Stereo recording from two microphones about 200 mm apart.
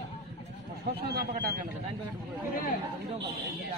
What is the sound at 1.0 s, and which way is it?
Speech, 50° right (ahead or behind).